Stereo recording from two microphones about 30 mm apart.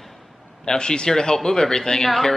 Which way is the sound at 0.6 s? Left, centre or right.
Left.